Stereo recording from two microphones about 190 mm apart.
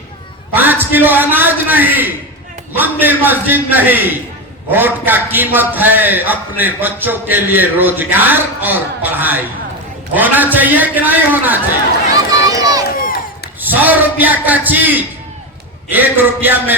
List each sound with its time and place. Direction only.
0.5 s a man's voice: 10° right (ahead or behind)
12.5 s run: 20° right (ahead or behind)
13.0 s crowd: 50° left (ahead or behind)
13.6 s a man's voice: 10° right (ahead or behind)